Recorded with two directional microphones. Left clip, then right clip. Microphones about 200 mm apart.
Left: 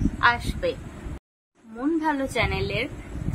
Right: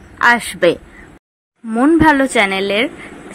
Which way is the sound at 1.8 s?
35° right (ahead or behind).